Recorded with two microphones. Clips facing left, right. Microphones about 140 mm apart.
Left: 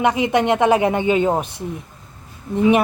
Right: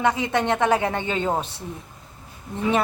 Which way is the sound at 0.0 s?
20° left (ahead or behind).